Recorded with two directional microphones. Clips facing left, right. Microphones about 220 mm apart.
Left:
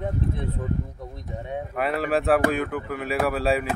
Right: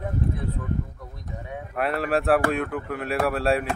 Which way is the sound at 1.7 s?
Centre (ahead or behind).